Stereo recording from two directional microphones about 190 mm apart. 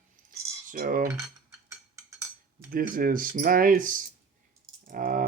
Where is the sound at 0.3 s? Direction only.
45° right (ahead or behind).